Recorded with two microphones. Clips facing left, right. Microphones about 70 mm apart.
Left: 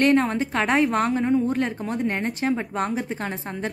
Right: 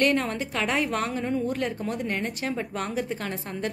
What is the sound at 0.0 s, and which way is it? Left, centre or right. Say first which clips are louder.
A woman's voice: left 5 dB; left.